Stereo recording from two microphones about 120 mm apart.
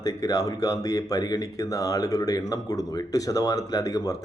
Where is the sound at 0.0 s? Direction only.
30° left (ahead or behind).